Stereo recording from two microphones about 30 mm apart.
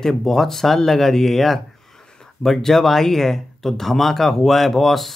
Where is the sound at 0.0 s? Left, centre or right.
Centre.